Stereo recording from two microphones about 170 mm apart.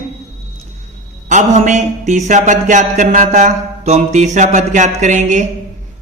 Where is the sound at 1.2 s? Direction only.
45° right (ahead or behind).